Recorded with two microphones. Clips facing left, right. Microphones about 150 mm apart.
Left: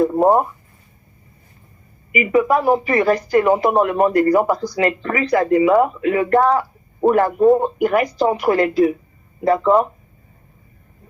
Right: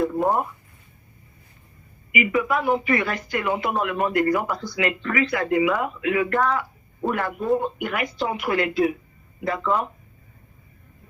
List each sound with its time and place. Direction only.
0.0 s speech: 40° left (ahead or behind)
2.1 s speech: 40° left (ahead or behind)